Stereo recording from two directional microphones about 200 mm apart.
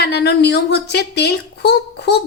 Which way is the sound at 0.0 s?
55° left (ahead or behind).